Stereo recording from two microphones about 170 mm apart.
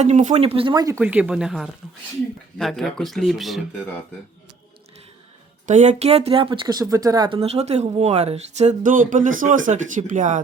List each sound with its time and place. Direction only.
0.0 s speech: 45° right (ahead or behind); by 0.9 s 25° right (ahead or behind)
0.9 s speech: 10° right (ahead or behind)
5.6 s speech: 45° right (ahead or behind); by 7.3 s 20° right (ahead or behind)
7.3 s speech: 40° right (ahead or behind)